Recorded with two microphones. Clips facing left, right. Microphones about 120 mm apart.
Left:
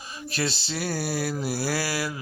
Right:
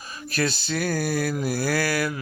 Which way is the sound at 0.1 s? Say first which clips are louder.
Right 3 dB; 25° left (ahead or behind).